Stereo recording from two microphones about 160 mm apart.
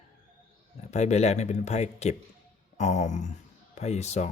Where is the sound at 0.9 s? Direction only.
45° left (ahead or behind).